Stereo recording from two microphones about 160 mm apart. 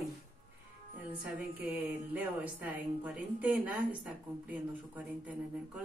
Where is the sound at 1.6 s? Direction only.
10° right (ahead or behind).